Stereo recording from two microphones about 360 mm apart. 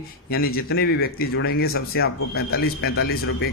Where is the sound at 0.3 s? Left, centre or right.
Left.